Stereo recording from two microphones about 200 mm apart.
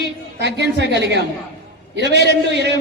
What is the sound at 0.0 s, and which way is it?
A woman's voice, 60° right (ahead or behind).